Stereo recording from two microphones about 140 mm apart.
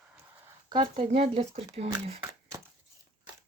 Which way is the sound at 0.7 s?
40° right (ahead or behind).